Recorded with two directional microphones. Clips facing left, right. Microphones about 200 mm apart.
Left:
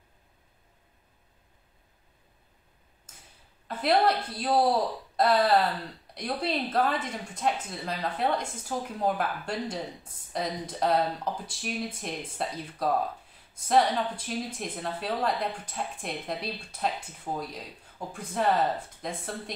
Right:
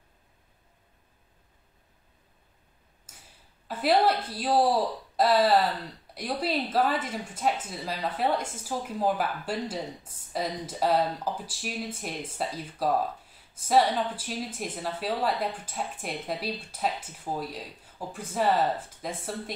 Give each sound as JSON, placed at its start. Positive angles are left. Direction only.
{"t": 3.6, "sound": "a woman's voice", "side_deg": -5}